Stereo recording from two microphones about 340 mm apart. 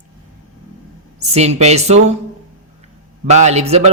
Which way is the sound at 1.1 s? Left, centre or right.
Centre.